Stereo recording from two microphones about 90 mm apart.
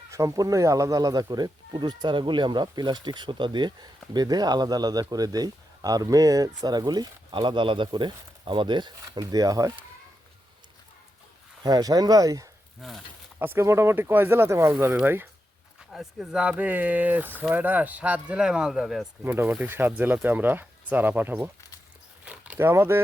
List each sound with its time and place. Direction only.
0.1 s speech: 35° right (ahead or behind); by 8.9 s 60° right (ahead or behind)
9.0 s speech: 40° right (ahead or behind)
11.6 s speech: 45° right (ahead or behind)
12.8 s speech: centre (ahead or behind)
13.4 s speech: 25° right (ahead or behind)
15.9 s speech: 5° right (ahead or behind)
19.2 s speech: 25° right (ahead or behind)
22.2 s biting: 15° right (ahead or behind)
22.5 s speech: 25° right (ahead or behind)